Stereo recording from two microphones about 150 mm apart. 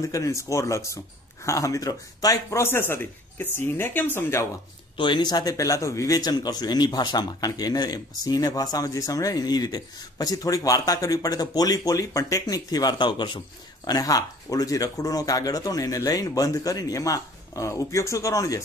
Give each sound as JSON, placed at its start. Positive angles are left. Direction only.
{"t": 0.0, "sound": "a man's voice", "side_deg": 20}
{"t": 4.9, "sound": "a man's voice", "side_deg": 30}